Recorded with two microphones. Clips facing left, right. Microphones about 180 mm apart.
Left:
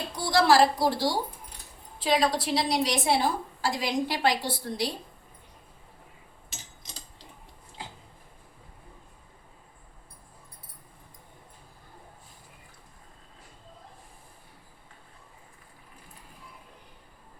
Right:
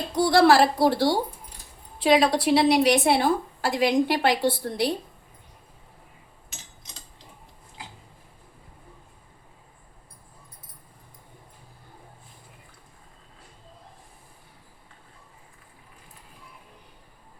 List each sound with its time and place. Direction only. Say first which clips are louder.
0.2 s a woman's voice: right 4 dB; 60° right (ahead or behind)